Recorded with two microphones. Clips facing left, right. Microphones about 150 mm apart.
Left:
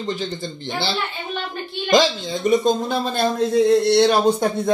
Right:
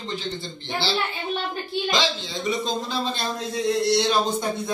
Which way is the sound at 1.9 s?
45° left (ahead or behind).